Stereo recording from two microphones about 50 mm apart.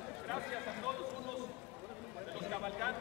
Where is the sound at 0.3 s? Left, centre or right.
Centre.